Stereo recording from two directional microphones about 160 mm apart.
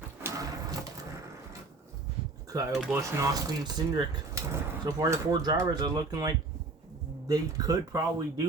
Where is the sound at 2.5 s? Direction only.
20° right (ahead or behind).